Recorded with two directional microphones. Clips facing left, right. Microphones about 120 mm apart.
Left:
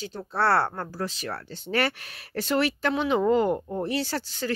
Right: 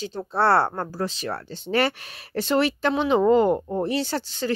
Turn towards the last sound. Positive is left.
turn(degrees=-25)  # may be behind; listen again after turning